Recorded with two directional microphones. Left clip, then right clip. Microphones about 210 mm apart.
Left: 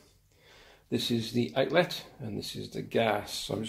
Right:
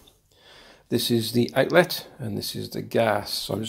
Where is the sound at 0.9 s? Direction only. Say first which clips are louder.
Right 7 dB; 40° right (ahead or behind).